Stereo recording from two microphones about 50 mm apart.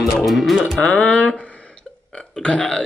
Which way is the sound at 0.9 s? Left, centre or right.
Left.